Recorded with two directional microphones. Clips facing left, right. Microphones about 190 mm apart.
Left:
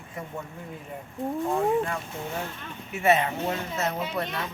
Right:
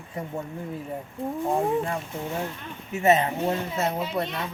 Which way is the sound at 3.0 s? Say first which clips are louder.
Right 2 dB; 35° right (ahead or behind).